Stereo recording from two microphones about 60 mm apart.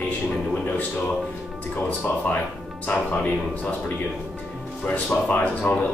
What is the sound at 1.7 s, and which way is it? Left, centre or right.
Speech, left.